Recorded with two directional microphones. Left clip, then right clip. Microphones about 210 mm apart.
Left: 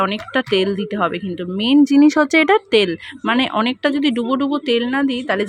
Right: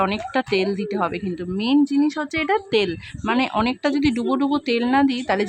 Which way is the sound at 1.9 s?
25° left (ahead or behind).